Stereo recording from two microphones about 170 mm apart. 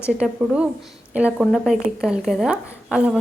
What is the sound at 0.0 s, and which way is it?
A woman's voice, 5° right (ahead or behind).